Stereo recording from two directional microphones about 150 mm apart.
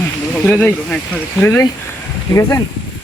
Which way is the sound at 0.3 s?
5° left (ahead or behind).